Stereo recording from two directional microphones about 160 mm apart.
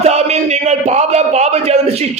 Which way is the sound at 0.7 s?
45° right (ahead or behind).